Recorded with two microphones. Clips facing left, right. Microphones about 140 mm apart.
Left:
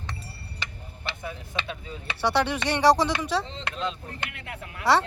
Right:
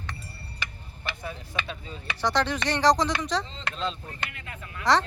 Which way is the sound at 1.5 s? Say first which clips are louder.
Left 1 dB; 5° left (ahead or behind).